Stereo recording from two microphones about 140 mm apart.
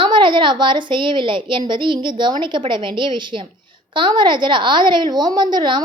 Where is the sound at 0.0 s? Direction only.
35° right (ahead or behind).